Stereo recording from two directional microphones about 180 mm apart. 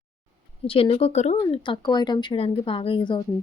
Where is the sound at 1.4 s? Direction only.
25° left (ahead or behind).